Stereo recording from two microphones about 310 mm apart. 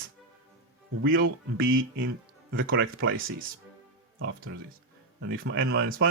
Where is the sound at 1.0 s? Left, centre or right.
Right.